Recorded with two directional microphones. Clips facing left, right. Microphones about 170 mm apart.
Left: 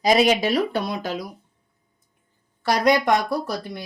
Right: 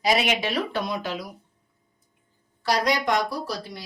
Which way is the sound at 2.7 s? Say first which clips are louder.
Left 5 dB; 50° left (ahead or behind).